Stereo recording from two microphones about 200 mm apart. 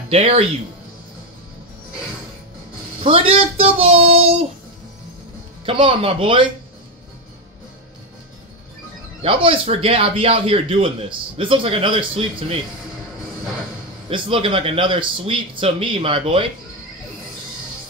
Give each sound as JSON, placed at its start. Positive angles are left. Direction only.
{"t": 0.1, "sound": "speech", "side_deg": -30}
{"t": 3.0, "sound": "speech", "side_deg": -30}
{"t": 5.7, "sound": "speech", "side_deg": -30}
{"t": 9.2, "sound": "speech", "side_deg": -25}
{"t": 14.0, "sound": "speech", "side_deg": -25}